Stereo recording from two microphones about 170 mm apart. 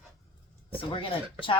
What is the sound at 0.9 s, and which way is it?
Speech, 30° left (ahead or behind).